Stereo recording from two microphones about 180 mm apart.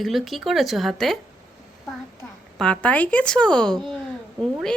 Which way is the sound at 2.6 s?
5° left (ahead or behind).